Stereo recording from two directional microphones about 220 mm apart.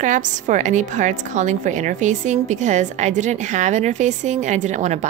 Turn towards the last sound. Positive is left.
turn(degrees=-30)  # may be behind; listen again after turning